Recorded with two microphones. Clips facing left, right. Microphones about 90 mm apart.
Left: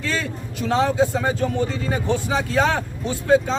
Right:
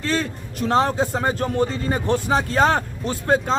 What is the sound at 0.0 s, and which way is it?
Speech, 45° right (ahead or behind).